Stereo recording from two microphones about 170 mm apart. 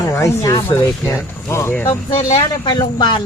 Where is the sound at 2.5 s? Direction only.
25° left (ahead or behind).